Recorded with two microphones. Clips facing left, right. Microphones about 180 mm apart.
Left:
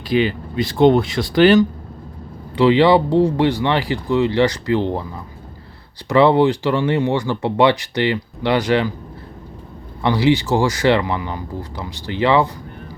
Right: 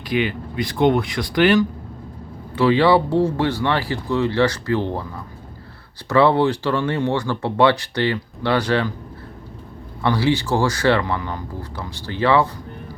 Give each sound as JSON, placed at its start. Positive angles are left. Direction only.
{"t": 0.1, "sound": "speech", "side_deg": 30}
{"t": 2.6, "sound": "speech", "side_deg": 20}
{"t": 10.0, "sound": "speech", "side_deg": 15}